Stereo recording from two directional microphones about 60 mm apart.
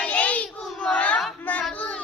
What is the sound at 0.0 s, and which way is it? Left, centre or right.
Child singing, left.